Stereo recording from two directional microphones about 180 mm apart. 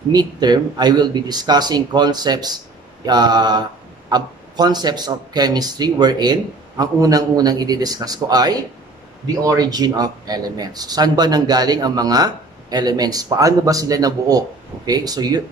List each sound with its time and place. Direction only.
0.1 s speech: 25° right (ahead or behind)